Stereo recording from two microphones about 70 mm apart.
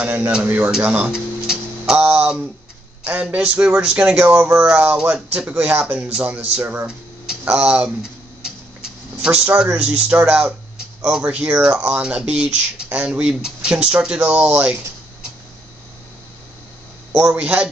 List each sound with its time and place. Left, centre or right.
0.0 s speech: right
1.1 s music: centre
2.0 s speech: centre
7.5 s a sound: centre
9.8 s speech: centre
17.2 s speech: centre